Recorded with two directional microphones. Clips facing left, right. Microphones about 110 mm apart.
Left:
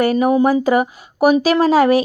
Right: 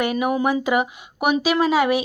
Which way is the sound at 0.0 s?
35° left (ahead or behind).